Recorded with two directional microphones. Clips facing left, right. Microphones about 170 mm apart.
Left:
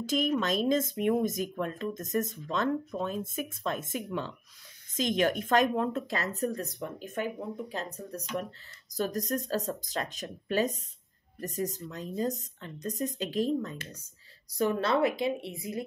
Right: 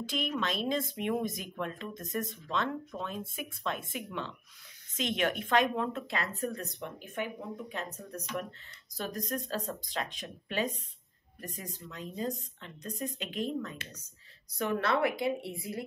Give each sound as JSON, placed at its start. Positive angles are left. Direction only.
{"t": 0.0, "sound": "speech", "side_deg": 40}
{"t": 7.7, "sound": "speech", "side_deg": 35}